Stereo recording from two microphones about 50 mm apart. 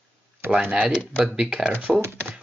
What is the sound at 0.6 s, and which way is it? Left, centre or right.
Speech, right.